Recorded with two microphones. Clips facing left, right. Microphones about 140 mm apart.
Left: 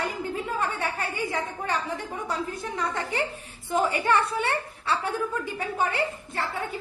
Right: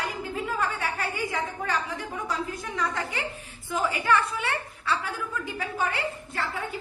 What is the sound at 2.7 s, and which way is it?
A woman's voice, 35° left (ahead or behind).